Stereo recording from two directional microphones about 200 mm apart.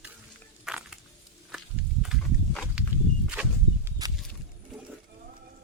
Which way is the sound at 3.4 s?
10° right (ahead or behind).